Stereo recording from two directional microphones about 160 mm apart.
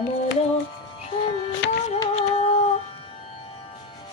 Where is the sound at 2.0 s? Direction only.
40° left (ahead or behind).